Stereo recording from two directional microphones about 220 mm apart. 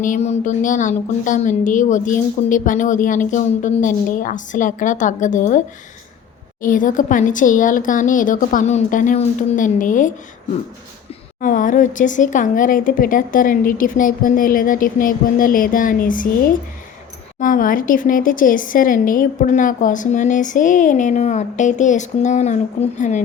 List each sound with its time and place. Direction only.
0.0 s speech: 35° left (ahead or behind)
11.3 s speech: 35° left (ahead or behind)